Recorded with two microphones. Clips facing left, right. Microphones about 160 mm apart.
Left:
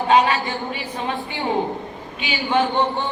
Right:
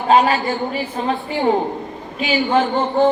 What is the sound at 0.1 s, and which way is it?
A woman's voice, 35° right (ahead or behind).